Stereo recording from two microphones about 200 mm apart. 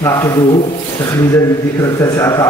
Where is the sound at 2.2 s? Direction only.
15° left (ahead or behind).